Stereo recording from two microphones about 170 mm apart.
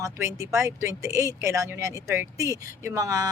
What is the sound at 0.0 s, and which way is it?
Speech, 20° right (ahead or behind).